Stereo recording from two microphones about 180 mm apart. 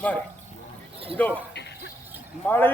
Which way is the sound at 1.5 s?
70° left (ahead or behind).